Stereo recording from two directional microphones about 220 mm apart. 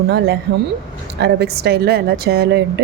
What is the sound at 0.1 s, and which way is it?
A woman's voice, 50° right (ahead or behind).